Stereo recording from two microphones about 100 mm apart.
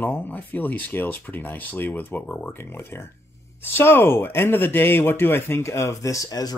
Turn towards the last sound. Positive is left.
turn(degrees=40)  # may be behind; listen again after turning